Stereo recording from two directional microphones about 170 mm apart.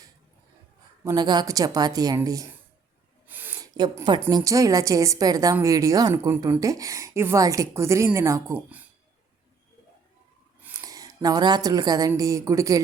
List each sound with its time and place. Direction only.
1.0 s a woman's voice: 25° right (ahead or behind)
3.2 s a sound: 10° right (ahead or behind)
3.8 s a woman's voice: 25° right (ahead or behind); by 8.9 s 10° right (ahead or behind)
10.6 s speech: 15° right (ahead or behind)